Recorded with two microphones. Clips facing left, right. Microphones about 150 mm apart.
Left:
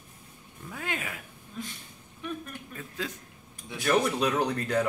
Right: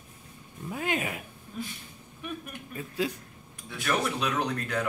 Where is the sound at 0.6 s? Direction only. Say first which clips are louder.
Right 5 dB; 20° right (ahead or behind).